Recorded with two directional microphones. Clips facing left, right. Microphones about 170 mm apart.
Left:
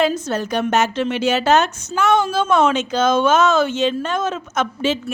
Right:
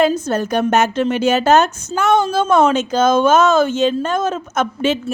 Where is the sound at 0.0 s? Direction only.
50° right (ahead or behind).